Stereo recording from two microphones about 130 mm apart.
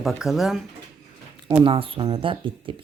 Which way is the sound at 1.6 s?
40° right (ahead or behind).